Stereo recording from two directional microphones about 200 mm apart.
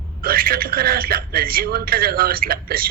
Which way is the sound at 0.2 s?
50° right (ahead or behind).